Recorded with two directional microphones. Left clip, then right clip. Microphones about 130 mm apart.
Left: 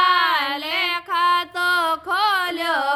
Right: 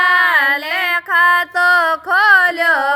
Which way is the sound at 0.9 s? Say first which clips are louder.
Right 8 dB; 45° right (ahead or behind).